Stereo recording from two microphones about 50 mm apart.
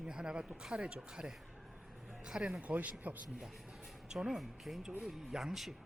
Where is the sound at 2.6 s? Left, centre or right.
Right.